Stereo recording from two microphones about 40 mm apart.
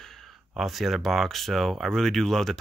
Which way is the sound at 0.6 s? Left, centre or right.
Centre.